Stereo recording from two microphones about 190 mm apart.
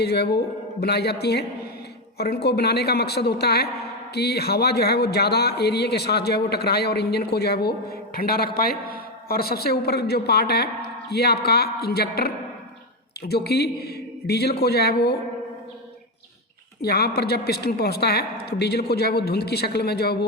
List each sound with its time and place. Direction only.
0.0 s a man's voice: 60° left (ahead or behind)
16.8 s a man's voice: 55° left (ahead or behind)